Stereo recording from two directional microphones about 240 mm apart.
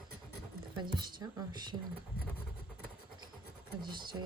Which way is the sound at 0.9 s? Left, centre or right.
Centre.